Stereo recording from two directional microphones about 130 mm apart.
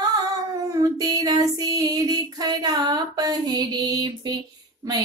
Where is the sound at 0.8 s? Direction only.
30° right (ahead or behind).